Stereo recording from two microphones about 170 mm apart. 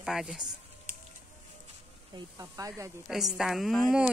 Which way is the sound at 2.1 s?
20° right (ahead or behind).